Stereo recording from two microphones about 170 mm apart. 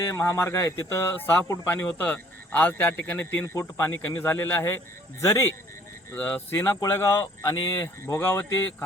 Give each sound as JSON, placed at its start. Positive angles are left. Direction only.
{"t": 0.0, "sound": "speech", "side_deg": 15}